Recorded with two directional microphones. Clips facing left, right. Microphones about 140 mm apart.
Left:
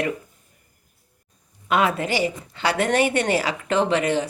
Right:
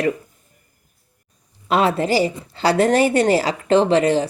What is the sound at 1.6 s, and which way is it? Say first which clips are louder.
A woman's voice: right 4 dB; 30° right (ahead or behind).